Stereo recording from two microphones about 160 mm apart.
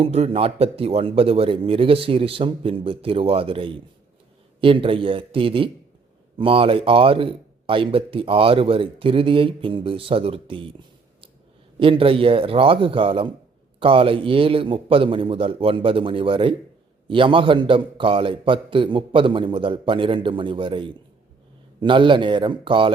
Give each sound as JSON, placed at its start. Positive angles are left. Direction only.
{"t": 0.0, "sound": "speech", "side_deg": -40}
{"t": 11.8, "sound": "speech", "side_deg": -35}